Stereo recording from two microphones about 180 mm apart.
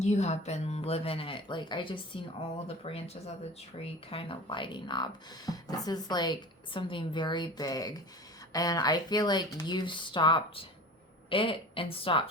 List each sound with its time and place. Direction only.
0.0 s speech: 40° left (ahead or behind)